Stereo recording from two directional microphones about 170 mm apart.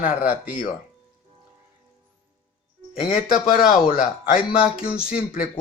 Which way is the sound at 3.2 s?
55° left (ahead or behind).